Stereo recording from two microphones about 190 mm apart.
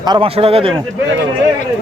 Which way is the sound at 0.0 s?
25° right (ahead or behind).